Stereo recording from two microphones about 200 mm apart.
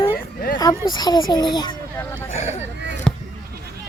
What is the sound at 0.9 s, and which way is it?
Speech, 20° left (ahead or behind).